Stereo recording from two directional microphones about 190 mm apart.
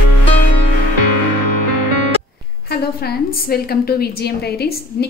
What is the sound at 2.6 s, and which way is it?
A woman's voice, 55° left (ahead or behind).